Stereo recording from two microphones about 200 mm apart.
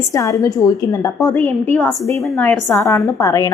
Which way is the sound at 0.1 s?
15° left (ahead or behind).